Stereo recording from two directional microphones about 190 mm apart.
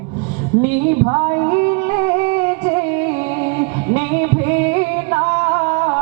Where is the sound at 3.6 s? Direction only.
15° right (ahead or behind).